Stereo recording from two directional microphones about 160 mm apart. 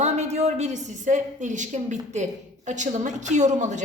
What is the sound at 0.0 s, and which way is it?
A woman's voice, 45° right (ahead or behind).